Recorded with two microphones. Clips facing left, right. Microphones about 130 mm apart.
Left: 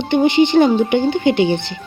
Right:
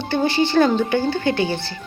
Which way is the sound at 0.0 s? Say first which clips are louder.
Left 6 dB; 20° left (ahead or behind).